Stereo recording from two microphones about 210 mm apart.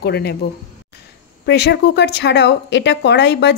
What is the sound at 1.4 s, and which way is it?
A woman's voice, 50° left (ahead or behind).